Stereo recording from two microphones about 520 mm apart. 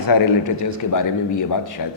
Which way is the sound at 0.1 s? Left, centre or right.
Left.